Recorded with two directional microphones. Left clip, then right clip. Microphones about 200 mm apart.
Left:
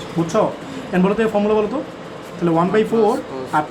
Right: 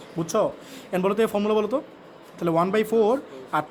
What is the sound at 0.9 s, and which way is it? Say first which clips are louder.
Speech: left 5 dB; 55° right (ahead or behind).